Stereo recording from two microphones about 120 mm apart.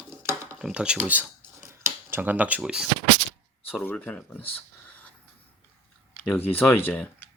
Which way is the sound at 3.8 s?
15° left (ahead or behind).